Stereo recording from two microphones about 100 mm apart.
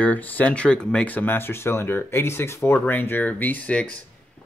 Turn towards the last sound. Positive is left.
turn(degrees=10)  # may be behind; listen again after turning